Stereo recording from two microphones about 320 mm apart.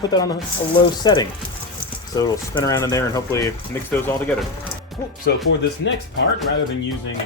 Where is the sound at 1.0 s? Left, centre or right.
Centre.